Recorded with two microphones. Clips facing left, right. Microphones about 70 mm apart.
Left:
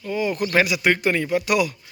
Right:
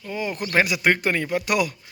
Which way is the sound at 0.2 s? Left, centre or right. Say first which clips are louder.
Left 4 dB; right.